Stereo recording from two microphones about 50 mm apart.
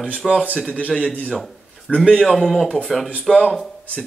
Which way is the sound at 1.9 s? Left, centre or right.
Left.